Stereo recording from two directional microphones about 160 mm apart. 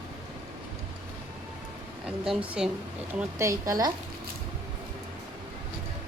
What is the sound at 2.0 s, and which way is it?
Speech, 5° right (ahead or behind).